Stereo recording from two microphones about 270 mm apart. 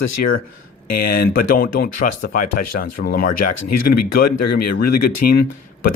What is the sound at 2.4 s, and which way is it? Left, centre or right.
Speech, left.